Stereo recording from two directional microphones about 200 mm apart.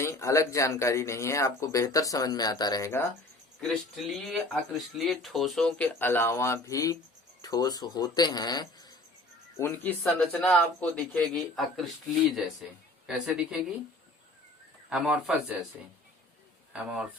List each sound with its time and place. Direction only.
0.0 s speech: 15° left (ahead or behind)
3.6 s speech: centre (ahead or behind)
10.0 s speech: centre (ahead or behind)
14.8 s speech: 5° right (ahead or behind)
16.7 s speech: 5° right (ahead or behind)